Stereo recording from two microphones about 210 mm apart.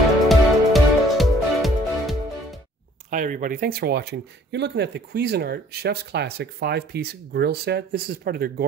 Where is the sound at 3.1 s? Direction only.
40° right (ahead or behind).